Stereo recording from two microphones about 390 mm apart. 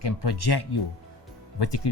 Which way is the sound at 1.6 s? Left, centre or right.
Left.